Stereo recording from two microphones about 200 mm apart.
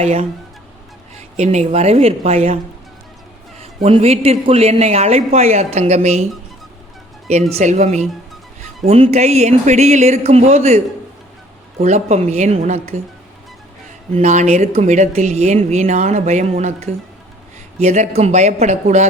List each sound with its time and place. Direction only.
0.0 s speech: 30° right (ahead or behind)
3.8 s speech: 30° right (ahead or behind)
7.5 s speech: 35° right (ahead or behind)
11.8 s speech: 35° right (ahead or behind)
14.1 s speech: 35° right (ahead or behind)